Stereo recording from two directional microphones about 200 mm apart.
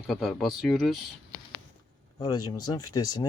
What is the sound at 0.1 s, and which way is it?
Speech, centre (ahead or behind).